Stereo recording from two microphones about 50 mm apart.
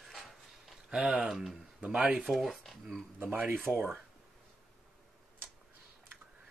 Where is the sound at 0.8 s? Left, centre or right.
Centre.